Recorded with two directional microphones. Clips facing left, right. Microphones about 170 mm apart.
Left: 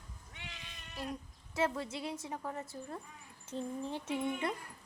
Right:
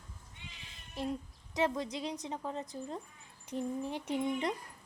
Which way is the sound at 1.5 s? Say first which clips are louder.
Right 2 dB; 15° right (ahead or behind).